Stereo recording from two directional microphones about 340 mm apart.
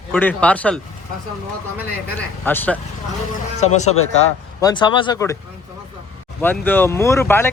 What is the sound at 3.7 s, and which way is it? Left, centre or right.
Speech, centre.